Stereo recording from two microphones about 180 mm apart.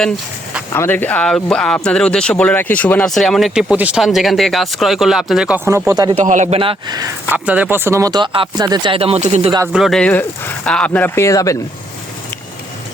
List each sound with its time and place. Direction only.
0.7 s speech: 15° left (ahead or behind); by 6.1 s 20° right (ahead or behind)
6.1 s speech: 45° right (ahead or behind)
6.6 s speech: 25° right (ahead or behind)
7.3 s speech: 10° right (ahead or behind); by 9.5 s 35° right (ahead or behind)
9.7 s speech: centre (ahead or behind); by 11.5 s 20° left (ahead or behind)